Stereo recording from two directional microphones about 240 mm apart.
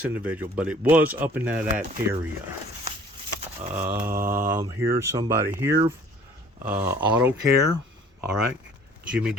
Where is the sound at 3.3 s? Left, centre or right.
Right.